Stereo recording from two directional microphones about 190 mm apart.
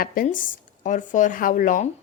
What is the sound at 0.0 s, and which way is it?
A woman's voice, 45° left (ahead or behind).